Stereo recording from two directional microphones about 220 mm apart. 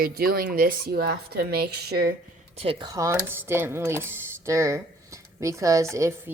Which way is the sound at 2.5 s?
25° right (ahead or behind).